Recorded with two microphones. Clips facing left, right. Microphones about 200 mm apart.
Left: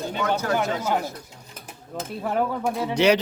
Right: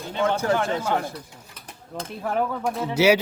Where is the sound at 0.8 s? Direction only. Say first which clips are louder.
Even; 5° left (ahead or behind).